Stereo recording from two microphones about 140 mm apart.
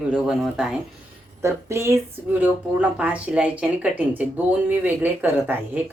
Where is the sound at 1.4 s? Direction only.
20° right (ahead or behind).